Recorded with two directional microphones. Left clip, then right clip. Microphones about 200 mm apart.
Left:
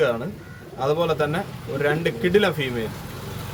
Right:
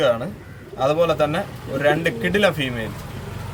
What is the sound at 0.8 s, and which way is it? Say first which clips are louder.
A man's voice: right 4 dB; 5° right (ahead or behind).